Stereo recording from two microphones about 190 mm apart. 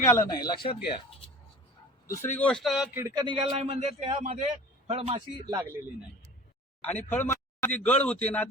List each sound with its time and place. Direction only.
0.0 s speech: 20° left (ahead or behind)
2.4 s speech: 5° left (ahead or behind)
3.0 s a man's voice: 15° right (ahead or behind)
5.5 s speech: 15° right (ahead or behind)
6.8 s speech: 10° left (ahead or behind)